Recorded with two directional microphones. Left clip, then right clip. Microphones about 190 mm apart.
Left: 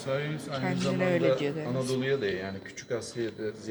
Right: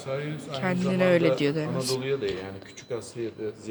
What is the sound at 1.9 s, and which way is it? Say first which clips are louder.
Speech: even; 15° right (ahead or behind).